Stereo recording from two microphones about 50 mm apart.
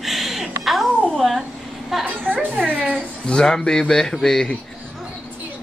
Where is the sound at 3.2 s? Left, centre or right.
Centre.